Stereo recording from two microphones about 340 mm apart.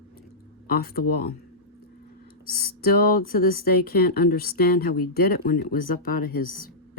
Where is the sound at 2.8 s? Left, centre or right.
Left.